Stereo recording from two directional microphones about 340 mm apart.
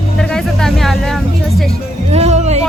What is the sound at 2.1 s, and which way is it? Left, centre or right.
Speech, centre.